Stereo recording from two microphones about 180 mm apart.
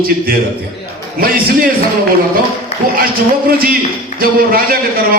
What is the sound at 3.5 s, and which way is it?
Speech, 55° right (ahead or behind).